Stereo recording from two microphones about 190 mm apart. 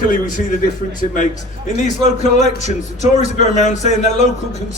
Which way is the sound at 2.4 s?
40° left (ahead or behind).